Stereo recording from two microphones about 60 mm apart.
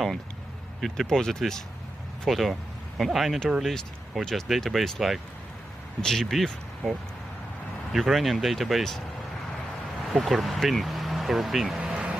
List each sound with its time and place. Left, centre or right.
0.7 s speech: centre
10.0 s speech: centre
11.8 s vehicle: centre